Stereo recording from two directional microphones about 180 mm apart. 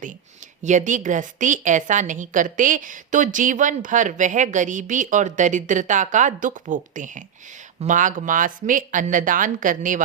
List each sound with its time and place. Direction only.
0.6 s a woman's voice: 40° right (ahead or behind)